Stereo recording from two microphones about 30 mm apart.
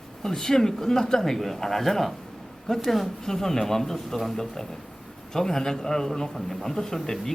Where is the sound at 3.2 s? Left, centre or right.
Centre.